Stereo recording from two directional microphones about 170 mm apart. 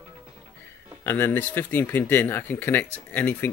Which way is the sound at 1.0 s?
10° left (ahead or behind).